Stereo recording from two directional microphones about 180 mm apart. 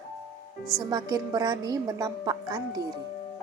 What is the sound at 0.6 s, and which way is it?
Speech, centre (ahead or behind).